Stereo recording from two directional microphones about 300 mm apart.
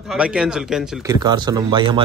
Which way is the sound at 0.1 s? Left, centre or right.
Centre.